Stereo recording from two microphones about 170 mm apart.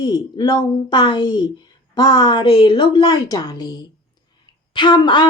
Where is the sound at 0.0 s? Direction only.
25° left (ahead or behind).